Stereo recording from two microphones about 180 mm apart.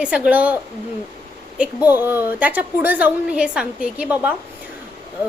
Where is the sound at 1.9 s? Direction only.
10° right (ahead or behind).